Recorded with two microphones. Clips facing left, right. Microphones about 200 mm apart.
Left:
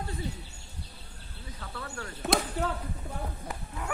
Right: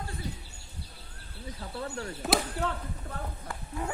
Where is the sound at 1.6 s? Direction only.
25° right (ahead or behind).